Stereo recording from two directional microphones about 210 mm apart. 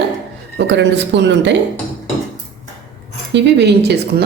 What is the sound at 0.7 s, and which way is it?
Speech, 55° right (ahead or behind).